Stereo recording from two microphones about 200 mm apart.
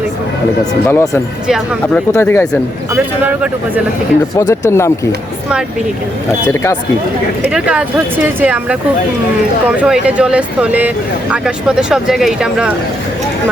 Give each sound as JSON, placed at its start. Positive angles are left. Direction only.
{"t": 0.7, "sound": "speech", "side_deg": 15}
{"t": 1.5, "sound": "speech", "side_deg": 0}
{"t": 2.1, "sound": "speech", "side_deg": 15}
{"t": 2.9, "sound": "speech", "side_deg": -5}
{"t": 4.4, "sound": "speech", "side_deg": 15}
{"t": 6.5, "sound": "speech", "side_deg": 15}
{"t": 7.4, "sound": "speech", "side_deg": -5}